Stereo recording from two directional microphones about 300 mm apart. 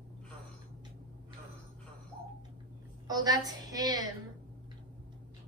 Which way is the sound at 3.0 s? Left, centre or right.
Centre.